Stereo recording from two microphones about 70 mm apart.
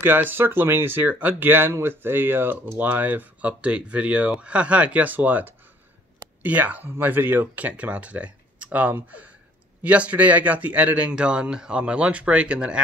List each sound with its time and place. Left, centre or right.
0.0 s speech: right; by 12.8 s centre